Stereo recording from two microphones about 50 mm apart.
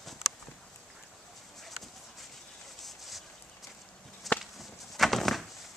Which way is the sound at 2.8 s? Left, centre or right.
Centre.